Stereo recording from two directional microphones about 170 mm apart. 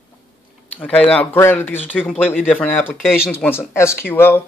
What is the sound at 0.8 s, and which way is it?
Speech, 5° left (ahead or behind).